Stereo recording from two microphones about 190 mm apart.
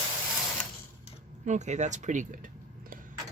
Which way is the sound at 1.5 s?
40° right (ahead or behind).